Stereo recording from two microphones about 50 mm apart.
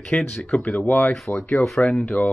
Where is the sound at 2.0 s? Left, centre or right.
Left.